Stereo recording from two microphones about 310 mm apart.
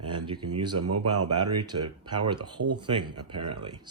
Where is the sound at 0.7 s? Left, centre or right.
Right.